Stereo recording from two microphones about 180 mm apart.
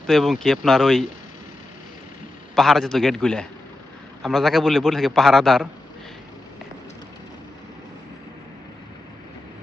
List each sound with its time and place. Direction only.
0.1 s a man's voice: centre (ahead or behind)
2.6 s a man's voice: centre (ahead or behind)